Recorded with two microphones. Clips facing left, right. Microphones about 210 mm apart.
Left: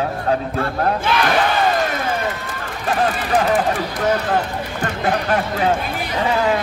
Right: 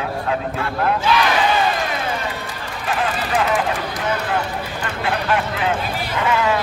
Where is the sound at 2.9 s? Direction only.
40° left (ahead or behind).